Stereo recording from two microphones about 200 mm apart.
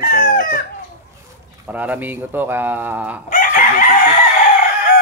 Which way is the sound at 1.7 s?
10° right (ahead or behind).